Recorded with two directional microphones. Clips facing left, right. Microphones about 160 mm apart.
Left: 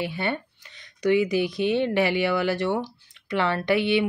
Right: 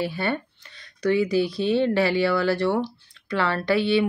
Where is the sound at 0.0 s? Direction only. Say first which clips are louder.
Right 2 dB; 20° left (ahead or behind).